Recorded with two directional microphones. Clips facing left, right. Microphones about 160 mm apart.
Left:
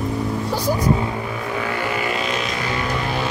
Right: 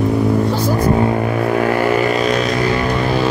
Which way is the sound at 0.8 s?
60° right (ahead or behind).